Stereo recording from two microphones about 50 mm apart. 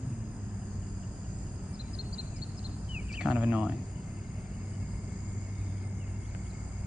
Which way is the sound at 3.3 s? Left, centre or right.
Right.